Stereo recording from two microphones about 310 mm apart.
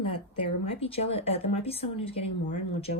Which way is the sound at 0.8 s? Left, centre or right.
Centre.